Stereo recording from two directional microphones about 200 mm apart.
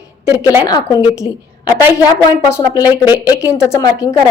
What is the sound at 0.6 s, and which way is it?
A woman's voice, 20° left (ahead or behind).